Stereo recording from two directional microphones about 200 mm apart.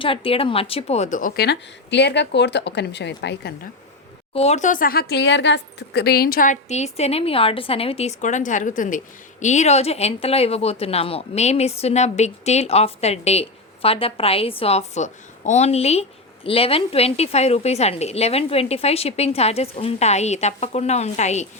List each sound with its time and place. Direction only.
0.0 s a woman's voice: 25° left (ahead or behind); by 3.7 s 55° left (ahead or behind)
4.4 s speech: 35° left (ahead or behind)